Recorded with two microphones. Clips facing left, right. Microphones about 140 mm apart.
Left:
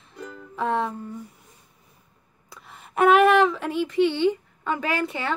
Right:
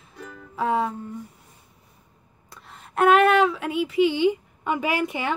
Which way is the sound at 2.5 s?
Centre (ahead or behind).